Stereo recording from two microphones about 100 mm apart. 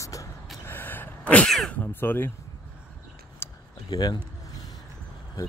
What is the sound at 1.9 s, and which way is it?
Speech, 20° left (ahead or behind).